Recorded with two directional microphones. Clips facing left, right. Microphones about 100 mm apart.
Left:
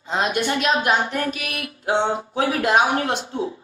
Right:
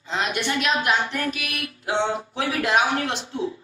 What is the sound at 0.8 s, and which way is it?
Speech, 35° left (ahead or behind).